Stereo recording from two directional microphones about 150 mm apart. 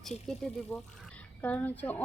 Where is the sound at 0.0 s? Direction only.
Centre (ahead or behind).